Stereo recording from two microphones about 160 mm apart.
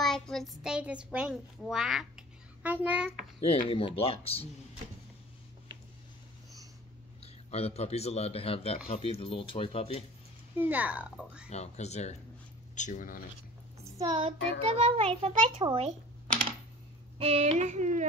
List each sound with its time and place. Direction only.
0.0 s a child's voice: centre (ahead or behind)
3.4 s speech: 40° left (ahead or behind)
7.5 s speech: 40° left (ahead or behind)
10.6 s speech: 10° right (ahead or behind)
11.4 s speech: 45° left (ahead or behind)
13.9 s a child's voice: 30° right (ahead or behind)
17.2 s speech: 40° right (ahead or behind)